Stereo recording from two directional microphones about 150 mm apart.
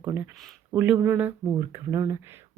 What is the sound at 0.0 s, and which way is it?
Speech, 15° right (ahead or behind).